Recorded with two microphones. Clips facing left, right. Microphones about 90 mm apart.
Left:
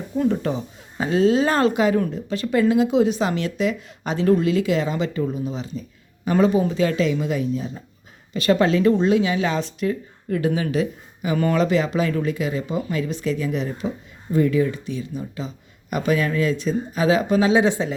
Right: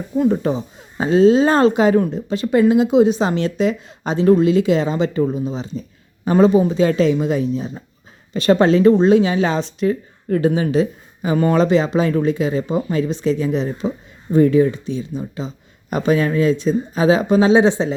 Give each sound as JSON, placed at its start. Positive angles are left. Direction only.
{"t": 0.3, "sound": "speech", "side_deg": -20}
{"t": 10.2, "sound": "speech", "side_deg": -40}
{"t": 10.5, "sound": "speech", "side_deg": -30}